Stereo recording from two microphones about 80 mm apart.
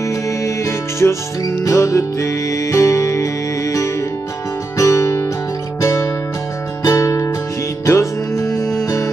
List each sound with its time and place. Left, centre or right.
0.4 s music: left